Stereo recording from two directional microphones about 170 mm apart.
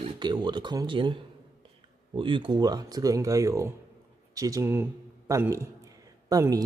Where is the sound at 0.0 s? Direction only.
25° right (ahead or behind).